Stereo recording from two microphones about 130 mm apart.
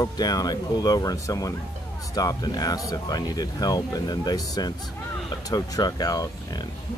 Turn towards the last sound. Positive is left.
turn(degrees=30)  # may be behind; listen again after turning